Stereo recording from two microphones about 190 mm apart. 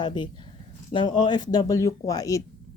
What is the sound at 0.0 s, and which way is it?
Speech, 25° left (ahead or behind).